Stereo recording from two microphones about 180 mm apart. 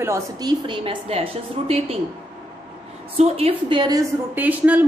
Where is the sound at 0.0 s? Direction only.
20° right (ahead or behind).